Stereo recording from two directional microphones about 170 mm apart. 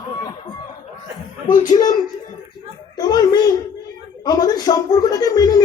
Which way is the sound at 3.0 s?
25° left (ahead or behind).